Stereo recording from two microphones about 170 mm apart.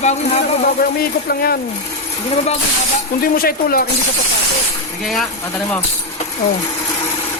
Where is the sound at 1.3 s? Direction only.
60° left (ahead or behind).